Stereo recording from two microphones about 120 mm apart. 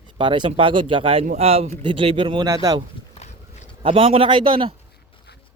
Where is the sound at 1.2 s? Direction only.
65° right (ahead or behind).